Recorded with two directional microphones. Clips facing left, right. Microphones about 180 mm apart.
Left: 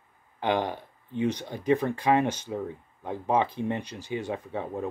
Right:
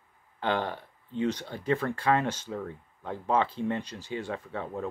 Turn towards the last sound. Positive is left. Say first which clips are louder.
# left 2 dB
turn(degrees=15)  # may be behind; listen again after turning